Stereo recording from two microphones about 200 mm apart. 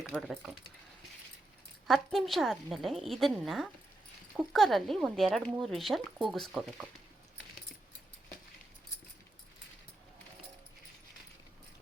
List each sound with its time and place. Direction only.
0.1 s speech: centre (ahead or behind)
1.9 s speech: centre (ahead or behind)